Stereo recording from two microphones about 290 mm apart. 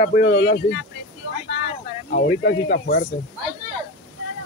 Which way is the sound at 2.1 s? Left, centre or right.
Left.